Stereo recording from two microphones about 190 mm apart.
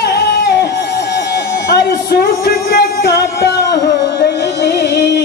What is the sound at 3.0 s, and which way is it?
Music, 60° left (ahead or behind).